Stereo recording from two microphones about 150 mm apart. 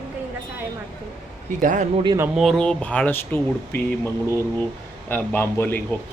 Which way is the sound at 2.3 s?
Centre (ahead or behind).